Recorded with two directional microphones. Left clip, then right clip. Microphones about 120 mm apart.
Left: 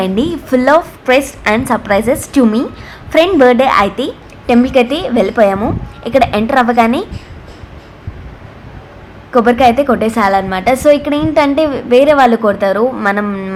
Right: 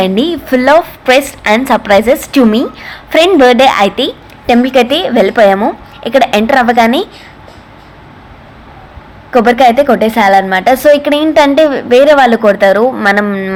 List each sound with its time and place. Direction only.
0.0 s a woman's voice: 40° right (ahead or behind)
3.8 s a woman's voice: 35° right (ahead or behind)
9.3 s a woman's voice: 35° right (ahead or behind)